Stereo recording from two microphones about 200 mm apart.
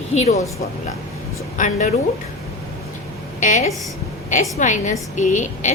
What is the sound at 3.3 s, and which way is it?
A woman's voice, 40° left (ahead or behind).